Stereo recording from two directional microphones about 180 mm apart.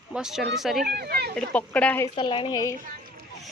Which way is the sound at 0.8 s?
65° right (ahead or behind).